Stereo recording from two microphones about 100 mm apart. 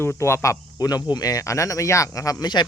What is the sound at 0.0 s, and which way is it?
Speech, 25° left (ahead or behind).